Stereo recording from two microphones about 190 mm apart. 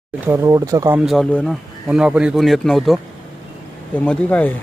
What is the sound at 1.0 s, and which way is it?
Speech, centre (ahead or behind).